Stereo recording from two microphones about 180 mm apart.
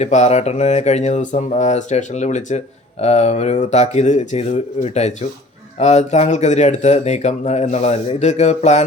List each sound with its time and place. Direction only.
0.0 s speech: 40° left (ahead or behind)